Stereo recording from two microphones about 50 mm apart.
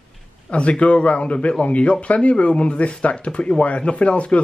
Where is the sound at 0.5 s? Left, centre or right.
Left.